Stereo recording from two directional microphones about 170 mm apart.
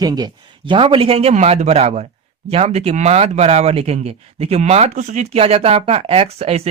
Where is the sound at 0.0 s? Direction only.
25° right (ahead or behind).